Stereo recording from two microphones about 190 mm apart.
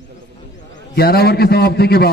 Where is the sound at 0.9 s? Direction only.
55° left (ahead or behind).